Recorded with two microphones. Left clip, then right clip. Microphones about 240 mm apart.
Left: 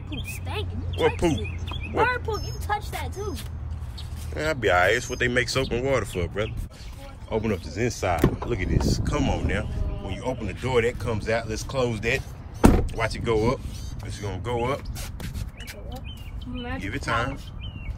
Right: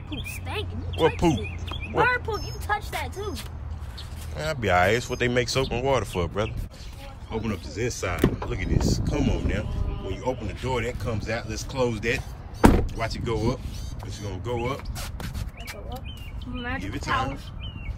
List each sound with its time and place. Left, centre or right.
0.1 s speech: centre
1.1 s speech: centre
2.0 s speech: centre
4.4 s speech: right
7.2 s speech: centre
15.0 s dog: centre
16.6 s speech: centre